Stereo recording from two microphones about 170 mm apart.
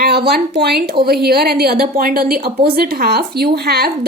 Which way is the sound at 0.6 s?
65° right (ahead or behind).